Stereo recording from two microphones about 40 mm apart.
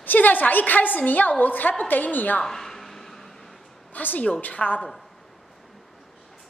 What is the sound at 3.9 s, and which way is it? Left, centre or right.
Speech, left.